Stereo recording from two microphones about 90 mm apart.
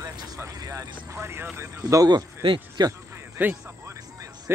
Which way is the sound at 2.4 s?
70° right (ahead or behind).